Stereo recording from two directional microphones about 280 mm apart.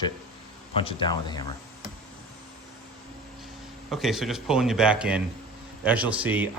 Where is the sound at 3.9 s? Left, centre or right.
Centre.